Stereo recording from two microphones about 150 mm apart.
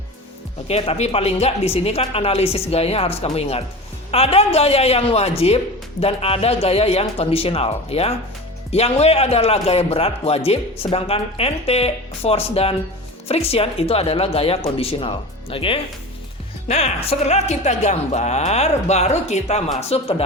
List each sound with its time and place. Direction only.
0.7 s a man's voice: 45° left (ahead or behind)